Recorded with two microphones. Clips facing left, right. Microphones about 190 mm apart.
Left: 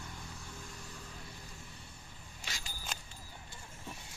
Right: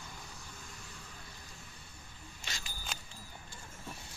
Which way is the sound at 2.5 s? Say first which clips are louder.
Even; 10° left (ahead or behind).